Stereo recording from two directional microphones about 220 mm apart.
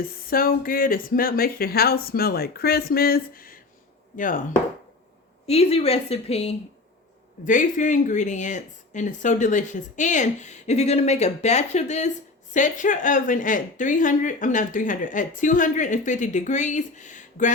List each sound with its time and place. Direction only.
0.0 s speech: 40° left (ahead or behind)
5.5 s a woman's voice: 25° left (ahead or behind)